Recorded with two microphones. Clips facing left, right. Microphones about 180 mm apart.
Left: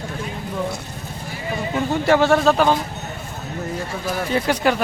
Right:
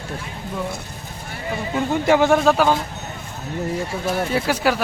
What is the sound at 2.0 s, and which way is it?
Speech, 15° right (ahead or behind).